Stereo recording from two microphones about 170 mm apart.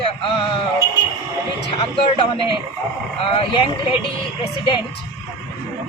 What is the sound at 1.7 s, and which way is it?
Speech, 30° left (ahead or behind).